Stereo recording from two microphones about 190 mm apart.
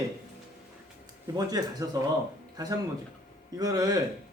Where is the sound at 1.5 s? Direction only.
20° right (ahead or behind).